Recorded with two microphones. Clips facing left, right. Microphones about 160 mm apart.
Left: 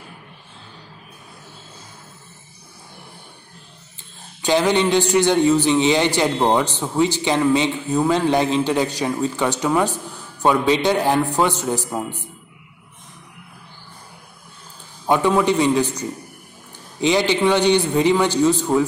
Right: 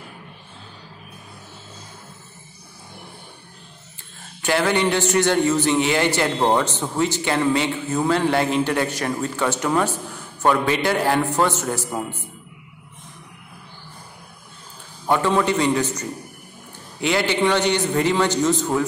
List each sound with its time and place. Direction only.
4.4 s a man's voice: 15° left (ahead or behind)
15.0 s a man's voice: 10° left (ahead or behind)